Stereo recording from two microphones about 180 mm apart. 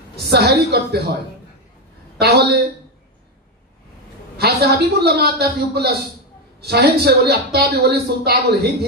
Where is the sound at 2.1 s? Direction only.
60° right (ahead or behind).